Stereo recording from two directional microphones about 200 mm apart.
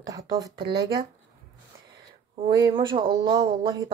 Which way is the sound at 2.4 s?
20° right (ahead or behind).